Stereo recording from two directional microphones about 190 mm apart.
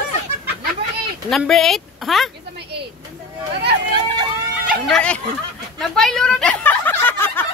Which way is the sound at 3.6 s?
60° right (ahead or behind).